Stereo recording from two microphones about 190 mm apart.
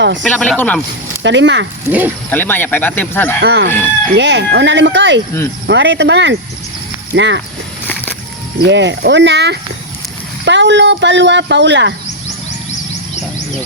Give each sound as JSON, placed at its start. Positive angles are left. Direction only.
{"t": 0.2, "sound": "speech", "side_deg": 5}
{"t": 1.2, "sound": "speech", "side_deg": -70}
{"t": 1.9, "sound": "speech", "side_deg": -10}
{"t": 2.3, "sound": "speech", "side_deg": 10}
{"t": 3.4, "sound": "speech", "side_deg": -65}
{"t": 3.7, "sound": "speech", "side_deg": 10}
{"t": 4.1, "sound": "speech", "side_deg": -65}
{"t": 8.6, "sound": "speech", "side_deg": -65}